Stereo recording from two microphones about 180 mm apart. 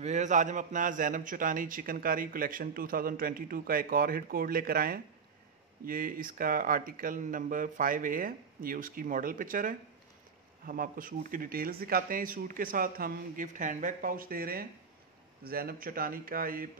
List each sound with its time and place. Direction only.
0.0 s a man's voice: 40° right (ahead or behind)